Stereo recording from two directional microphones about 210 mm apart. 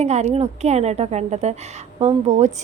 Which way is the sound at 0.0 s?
30° right (ahead or behind).